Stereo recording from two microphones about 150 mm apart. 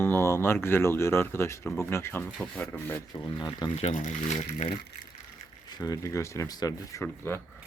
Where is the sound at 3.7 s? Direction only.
50° left (ahead or behind).